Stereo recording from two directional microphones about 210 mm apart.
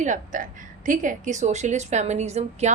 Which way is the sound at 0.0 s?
35° right (ahead or behind).